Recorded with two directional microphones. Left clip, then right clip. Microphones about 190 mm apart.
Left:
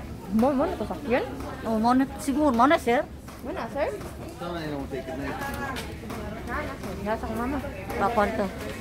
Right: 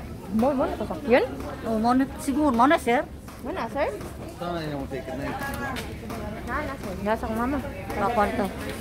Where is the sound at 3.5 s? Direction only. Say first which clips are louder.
Right 2 dB; 30° right (ahead or behind).